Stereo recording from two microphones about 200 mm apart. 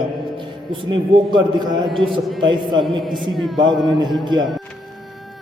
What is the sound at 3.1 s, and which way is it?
Speech, centre (ahead or behind).